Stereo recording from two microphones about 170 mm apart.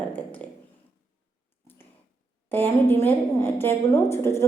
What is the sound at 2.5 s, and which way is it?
A woman's voice, 10° left (ahead or behind).